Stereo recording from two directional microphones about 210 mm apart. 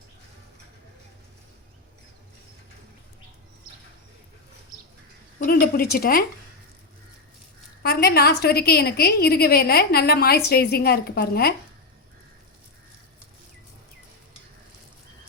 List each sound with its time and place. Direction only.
5.5 s a woman's voice: 45° left (ahead or behind)
7.8 s a woman's voice: 50° left (ahead or behind)